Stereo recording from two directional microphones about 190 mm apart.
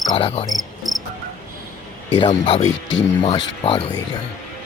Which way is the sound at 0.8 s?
Centre (ahead or behind).